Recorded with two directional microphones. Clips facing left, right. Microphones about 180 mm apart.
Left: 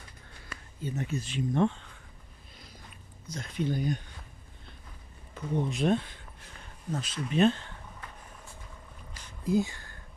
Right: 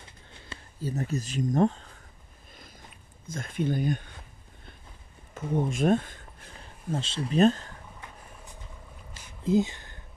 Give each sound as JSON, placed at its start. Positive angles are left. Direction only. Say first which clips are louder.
{"t": 0.0, "sound": "a sound", "louder": "right 1 dB", "side_deg": -25}
{"t": 0.7, "sound": "speech", "louder": "right 3 dB", "side_deg": -35}
{"t": 3.3, "sound": "speech", "louder": "right 2 dB", "side_deg": -50}
{"t": 5.3, "sound": "speech", "louder": "right 3 dB", "side_deg": -50}
{"t": 6.6, "sound": "speech", "louder": "right 3 dB", "side_deg": -30}
{"t": 9.4, "sound": "speech", "louder": "right 3 dB", "side_deg": -20}